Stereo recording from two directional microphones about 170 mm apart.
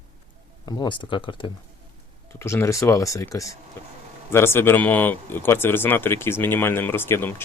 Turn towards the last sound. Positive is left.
turn(degrees=15)  # may be behind; listen again after turning